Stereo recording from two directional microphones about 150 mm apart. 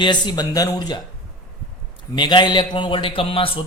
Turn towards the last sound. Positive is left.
turn(degrees=35)  # may be behind; listen again after turning